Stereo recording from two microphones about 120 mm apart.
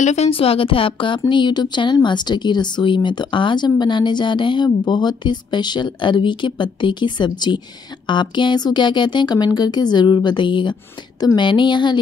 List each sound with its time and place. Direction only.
0.0 s a woman's voice: 65° left (ahead or behind); by 12.0 s 40° left (ahead or behind)